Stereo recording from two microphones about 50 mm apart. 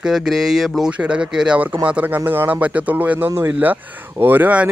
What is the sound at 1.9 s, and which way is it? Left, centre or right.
Speech, right.